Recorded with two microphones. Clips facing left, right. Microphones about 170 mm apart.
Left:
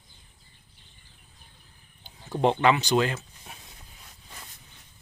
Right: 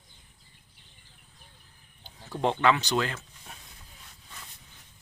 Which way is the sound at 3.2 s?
10° left (ahead or behind).